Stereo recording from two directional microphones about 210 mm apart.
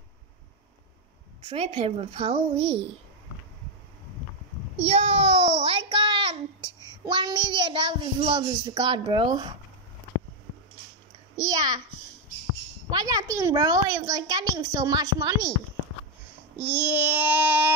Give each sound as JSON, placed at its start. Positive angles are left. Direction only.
{"t": 1.4, "sound": "speech", "side_deg": -25}
{"t": 4.7, "sound": "a child's voice", "side_deg": -30}
{"t": 11.3, "sound": "a woman's voice", "side_deg": -15}
{"t": 12.9, "sound": "a woman's voice", "side_deg": -15}
{"t": 16.5, "sound": "a woman's voice", "side_deg": -10}